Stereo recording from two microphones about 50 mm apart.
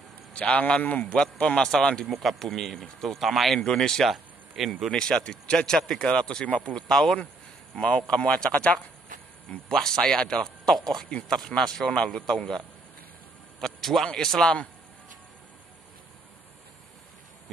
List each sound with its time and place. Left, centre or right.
0.3 s a man's voice: left
2.0 s speech: centre
4.9 s speech: centre
6.4 s a man's voice: left
6.9 s a man's voice: centre
9.7 s speech: centre
13.6 s a sound: centre
14.0 s speech: centre